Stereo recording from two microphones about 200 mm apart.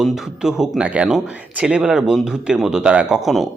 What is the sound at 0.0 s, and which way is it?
Speech, centre (ahead or behind).